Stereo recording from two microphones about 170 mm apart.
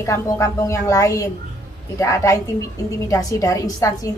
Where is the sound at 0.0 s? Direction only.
20° left (ahead or behind).